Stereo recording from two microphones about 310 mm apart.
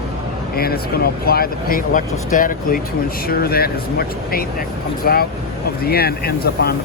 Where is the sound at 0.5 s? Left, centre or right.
Left.